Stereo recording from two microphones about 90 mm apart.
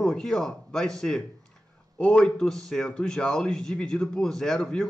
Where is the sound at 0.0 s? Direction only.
10° left (ahead or behind).